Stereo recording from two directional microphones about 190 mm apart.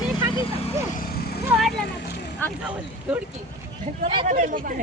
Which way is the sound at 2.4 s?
10° left (ahead or behind).